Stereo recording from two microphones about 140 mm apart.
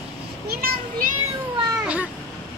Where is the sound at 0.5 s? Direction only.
90° right.